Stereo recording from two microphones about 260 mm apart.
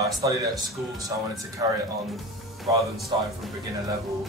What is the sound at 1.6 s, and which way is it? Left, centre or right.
Speech, centre.